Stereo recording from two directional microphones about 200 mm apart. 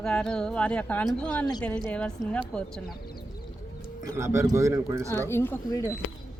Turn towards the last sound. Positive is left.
turn(degrees=10)  # may be behind; listen again after turning